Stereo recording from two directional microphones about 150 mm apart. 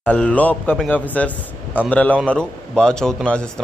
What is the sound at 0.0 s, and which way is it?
Speech, 10° left (ahead or behind).